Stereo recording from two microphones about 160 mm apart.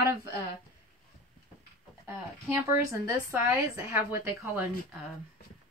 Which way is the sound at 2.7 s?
20° right (ahead or behind).